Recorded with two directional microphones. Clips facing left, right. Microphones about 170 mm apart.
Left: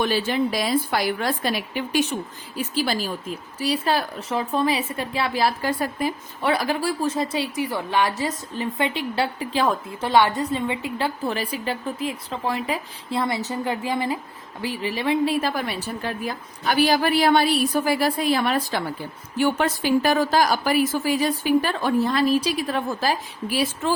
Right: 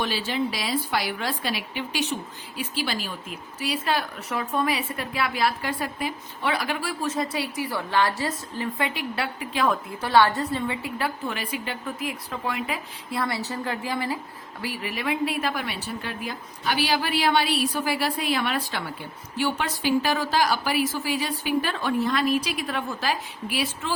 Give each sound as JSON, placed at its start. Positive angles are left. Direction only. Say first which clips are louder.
{"t": 0.0, "sound": "a woman's voice", "louder": "left 5 dB", "side_deg": 50}
{"t": 10.1, "sound": "a woman's voice", "louder": "left 1 dB", "side_deg": 15}